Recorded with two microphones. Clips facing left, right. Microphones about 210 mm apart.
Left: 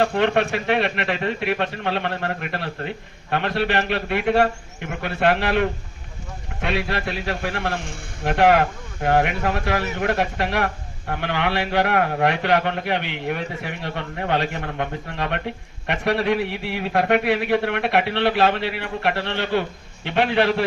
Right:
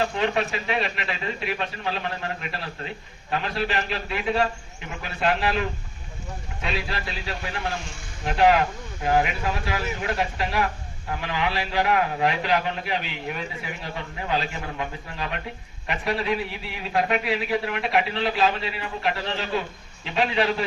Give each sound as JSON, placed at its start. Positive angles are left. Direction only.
{"t": 0.0, "sound": "a man's voice", "side_deg": 60}